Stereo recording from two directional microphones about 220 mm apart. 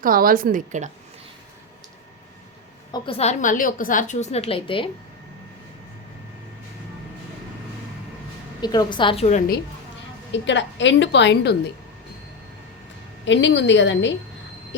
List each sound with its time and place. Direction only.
0.0 s a woman's voice: 40° right (ahead or behind)
2.9 s a woman's voice: 25° left (ahead or behind)
8.6 s a woman's voice: 20° left (ahead or behind)
10.3 s a woman's voice: 55° left (ahead or behind)
13.2 s a woman's voice: 55° left (ahead or behind)